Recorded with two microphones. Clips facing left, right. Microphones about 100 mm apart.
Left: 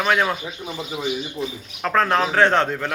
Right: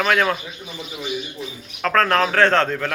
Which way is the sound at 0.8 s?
30° left (ahead or behind).